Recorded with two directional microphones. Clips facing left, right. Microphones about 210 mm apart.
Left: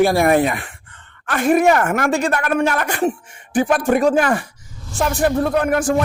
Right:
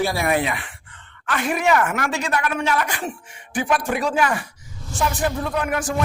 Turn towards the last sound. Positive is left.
turn(degrees=50)  # may be behind; listen again after turning